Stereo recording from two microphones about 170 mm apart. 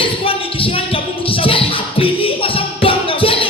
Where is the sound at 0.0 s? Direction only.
30° left (ahead or behind).